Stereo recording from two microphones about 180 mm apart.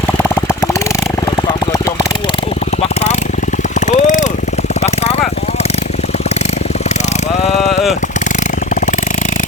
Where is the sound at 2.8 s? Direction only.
40° left (ahead or behind).